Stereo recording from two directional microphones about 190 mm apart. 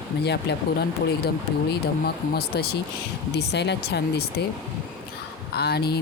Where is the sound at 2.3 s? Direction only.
55° left (ahead or behind).